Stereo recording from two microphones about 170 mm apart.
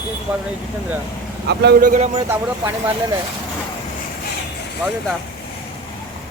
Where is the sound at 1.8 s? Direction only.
50° right (ahead or behind).